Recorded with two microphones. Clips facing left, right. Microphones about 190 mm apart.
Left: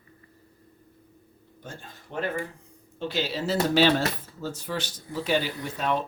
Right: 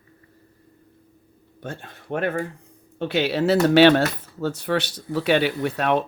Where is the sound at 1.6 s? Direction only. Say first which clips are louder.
Right 7 dB; 65° right (ahead or behind).